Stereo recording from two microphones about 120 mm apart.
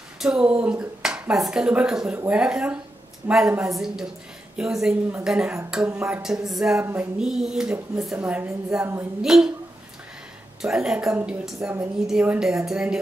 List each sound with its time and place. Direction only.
0.2 s a woman's voice: 5° right (ahead or behind)
6.8 s speech: 20° right (ahead or behind)
7.2 s a woman's voice: 5° right (ahead or behind)
10.6 s a woman's voice: 5° right (ahead or behind)